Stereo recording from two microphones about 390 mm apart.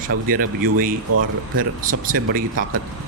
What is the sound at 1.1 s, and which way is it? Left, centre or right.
Speech, right.